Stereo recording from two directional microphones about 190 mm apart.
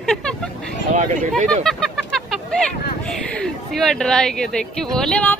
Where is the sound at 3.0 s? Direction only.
5° left (ahead or behind).